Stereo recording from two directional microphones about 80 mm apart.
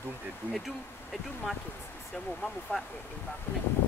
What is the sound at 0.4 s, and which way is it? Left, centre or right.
Bee, left.